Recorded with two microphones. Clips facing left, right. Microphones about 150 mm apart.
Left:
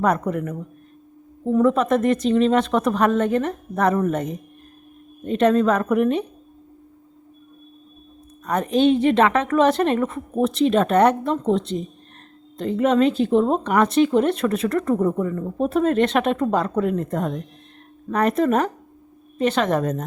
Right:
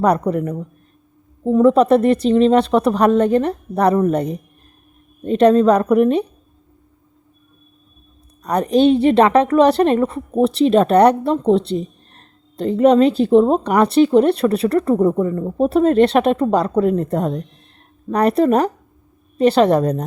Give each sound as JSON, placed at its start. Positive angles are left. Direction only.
{"t": 0.0, "sound": "speech", "side_deg": -35}
{"t": 8.4, "sound": "speech", "side_deg": -35}